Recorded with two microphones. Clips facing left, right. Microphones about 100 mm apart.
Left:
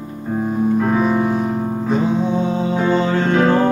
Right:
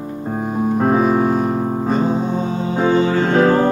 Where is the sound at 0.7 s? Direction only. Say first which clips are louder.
Right 3 dB; 40° right (ahead or behind).